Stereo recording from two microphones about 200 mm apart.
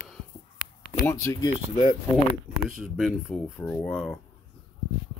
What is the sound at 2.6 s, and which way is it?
Speech, centre (ahead or behind).